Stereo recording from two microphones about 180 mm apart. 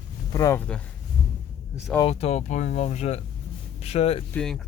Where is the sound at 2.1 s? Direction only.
35° left (ahead or behind).